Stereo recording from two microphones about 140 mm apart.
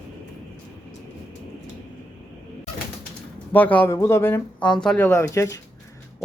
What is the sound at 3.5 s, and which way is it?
Speech, 10° left (ahead or behind).